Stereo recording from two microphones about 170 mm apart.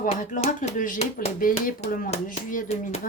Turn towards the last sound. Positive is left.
turn(degrees=40)  # may be behind; listen again after turning